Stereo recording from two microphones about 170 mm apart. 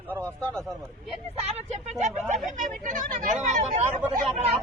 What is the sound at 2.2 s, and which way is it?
Speech, centre (ahead or behind).